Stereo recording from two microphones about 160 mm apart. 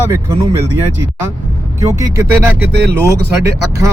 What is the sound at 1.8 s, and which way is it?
Speech, 20° right (ahead or behind).